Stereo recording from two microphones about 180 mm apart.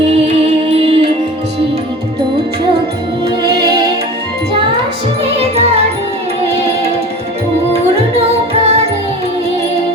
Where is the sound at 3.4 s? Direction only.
25° right (ahead or behind).